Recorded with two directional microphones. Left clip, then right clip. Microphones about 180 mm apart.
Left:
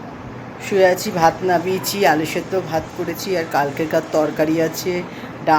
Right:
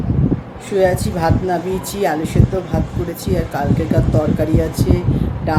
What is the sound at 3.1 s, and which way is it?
Speech, 15° right (ahead or behind).